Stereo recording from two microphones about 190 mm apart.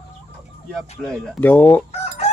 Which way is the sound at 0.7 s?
Centre (ahead or behind).